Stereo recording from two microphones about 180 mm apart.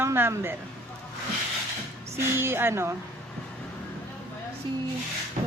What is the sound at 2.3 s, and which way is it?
Speech, 10° right (ahead or behind).